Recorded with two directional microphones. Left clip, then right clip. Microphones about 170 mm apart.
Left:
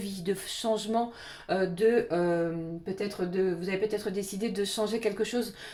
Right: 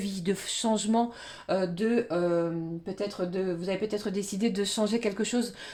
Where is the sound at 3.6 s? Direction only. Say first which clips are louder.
Left 1 dB; 40° right (ahead or behind).